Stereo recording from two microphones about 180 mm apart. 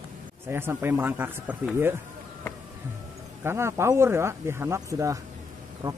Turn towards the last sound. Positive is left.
turn(degrees=-20)  # may be behind; listen again after turning